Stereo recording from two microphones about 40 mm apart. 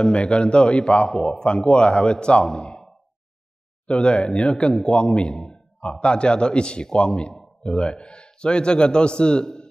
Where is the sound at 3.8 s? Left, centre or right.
Left.